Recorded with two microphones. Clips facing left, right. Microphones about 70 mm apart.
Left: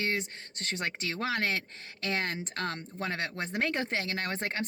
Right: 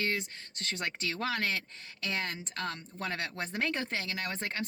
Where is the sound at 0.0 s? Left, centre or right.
Left.